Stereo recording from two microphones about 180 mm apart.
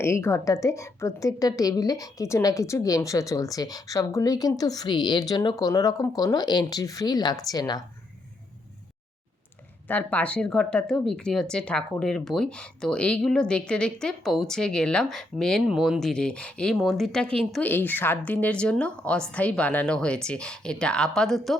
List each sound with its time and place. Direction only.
0.0 s a woman's voice: 15° left (ahead or behind)
9.9 s speech: 10° left (ahead or behind)